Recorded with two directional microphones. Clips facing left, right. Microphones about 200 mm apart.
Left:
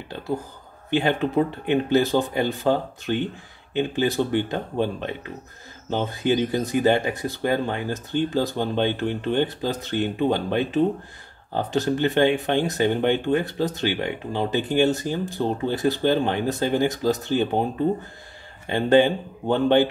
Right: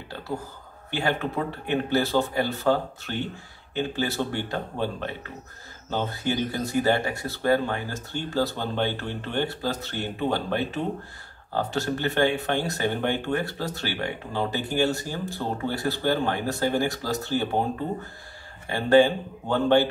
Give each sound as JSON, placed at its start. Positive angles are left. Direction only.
{"t": 0.8, "sound": "speech", "side_deg": 20}
{"t": 18.7, "sound": "speech", "side_deg": 20}